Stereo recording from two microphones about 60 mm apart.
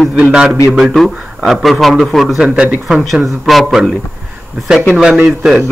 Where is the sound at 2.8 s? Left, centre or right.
Centre.